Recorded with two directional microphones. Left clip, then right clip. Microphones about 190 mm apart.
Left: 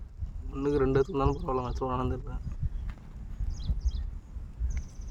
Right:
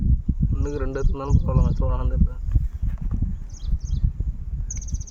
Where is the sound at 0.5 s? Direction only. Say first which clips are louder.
Left 4 dB; 45° left (ahead or behind).